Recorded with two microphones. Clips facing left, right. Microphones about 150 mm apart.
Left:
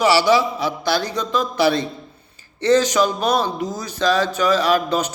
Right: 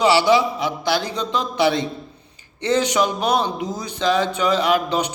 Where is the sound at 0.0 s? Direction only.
20° right (ahead or behind).